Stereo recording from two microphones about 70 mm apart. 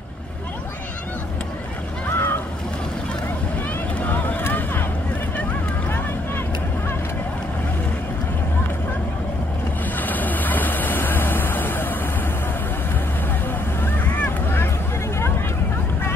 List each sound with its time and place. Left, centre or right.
2.0 s goose: left
4.0 s vehicle: left
5.9 s vehicle: left
9.9 s vehicle: left
13.8 s boat: left